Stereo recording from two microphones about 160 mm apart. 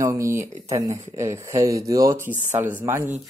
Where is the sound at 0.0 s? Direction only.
20° right (ahead or behind).